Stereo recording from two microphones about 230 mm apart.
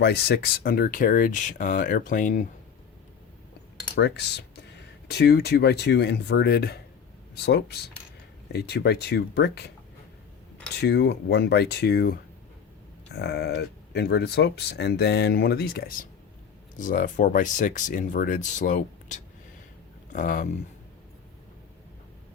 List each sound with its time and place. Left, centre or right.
0.0 s speech: left
3.9 s speech: left
10.8 s speech: left